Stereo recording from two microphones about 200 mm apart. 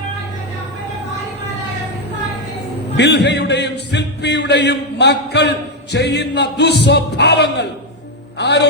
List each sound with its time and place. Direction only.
3.0 s speech: 55° left (ahead or behind)